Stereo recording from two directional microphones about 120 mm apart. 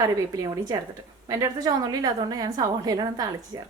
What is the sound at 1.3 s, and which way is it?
A woman's voice, 30° right (ahead or behind).